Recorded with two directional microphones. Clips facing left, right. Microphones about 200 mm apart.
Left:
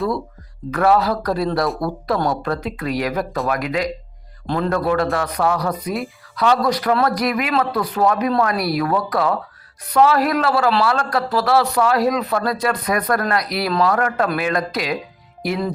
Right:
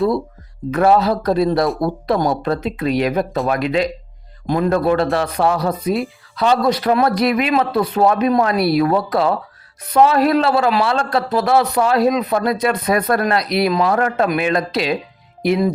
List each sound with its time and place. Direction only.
0.7 s a man's voice: 25° right (ahead or behind)
4.4 s a man's voice: 15° right (ahead or behind)